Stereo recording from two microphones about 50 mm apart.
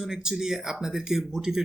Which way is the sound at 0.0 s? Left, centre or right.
Centre.